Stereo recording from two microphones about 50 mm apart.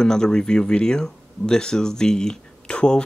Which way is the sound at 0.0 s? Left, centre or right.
Centre.